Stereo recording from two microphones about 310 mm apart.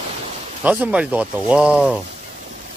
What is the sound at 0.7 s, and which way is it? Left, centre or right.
Speech, centre.